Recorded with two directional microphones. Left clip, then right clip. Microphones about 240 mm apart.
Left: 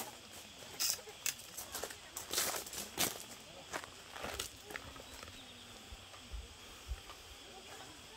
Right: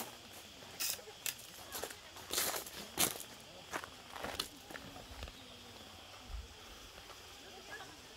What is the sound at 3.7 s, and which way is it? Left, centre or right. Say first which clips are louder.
Walk: right 1 dB; right.